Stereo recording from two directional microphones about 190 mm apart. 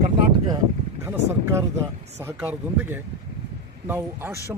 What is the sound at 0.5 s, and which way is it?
Speech, 15° right (ahead or behind).